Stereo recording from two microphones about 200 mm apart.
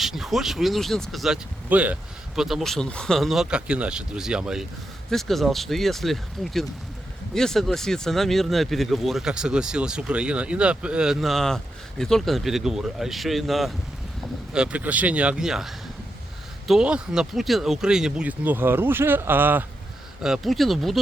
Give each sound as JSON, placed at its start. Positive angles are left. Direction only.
{"t": 0.0, "sound": "speech", "side_deg": 0}